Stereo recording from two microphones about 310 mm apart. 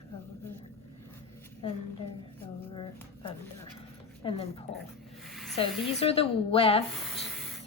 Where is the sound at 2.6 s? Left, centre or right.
Centre.